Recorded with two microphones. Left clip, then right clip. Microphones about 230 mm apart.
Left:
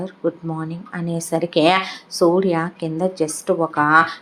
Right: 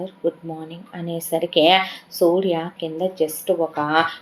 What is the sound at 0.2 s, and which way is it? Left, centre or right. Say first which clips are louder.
Speech: left 1 dB; left.